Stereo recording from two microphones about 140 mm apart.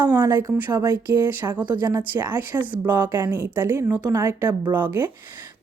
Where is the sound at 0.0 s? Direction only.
15° right (ahead or behind).